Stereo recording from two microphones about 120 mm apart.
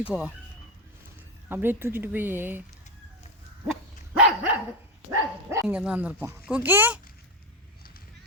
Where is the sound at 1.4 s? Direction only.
20° right (ahead or behind).